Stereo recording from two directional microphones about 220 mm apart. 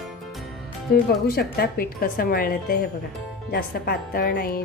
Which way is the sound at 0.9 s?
45° left (ahead or behind).